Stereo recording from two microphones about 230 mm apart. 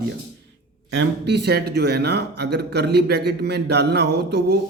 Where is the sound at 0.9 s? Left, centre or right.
Right.